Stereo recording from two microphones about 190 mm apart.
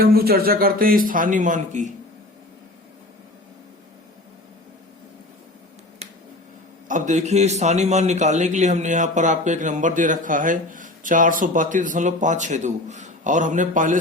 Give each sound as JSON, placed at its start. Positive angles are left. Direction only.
{"t": 0.0, "sound": "speech", "side_deg": -55}
{"t": 6.8, "sound": "a man's voice", "side_deg": -40}